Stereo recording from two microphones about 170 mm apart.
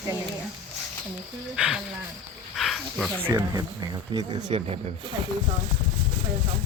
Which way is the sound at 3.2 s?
20° right (ahead or behind).